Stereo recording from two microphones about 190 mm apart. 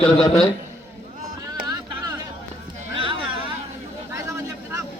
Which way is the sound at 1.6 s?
20° right (ahead or behind).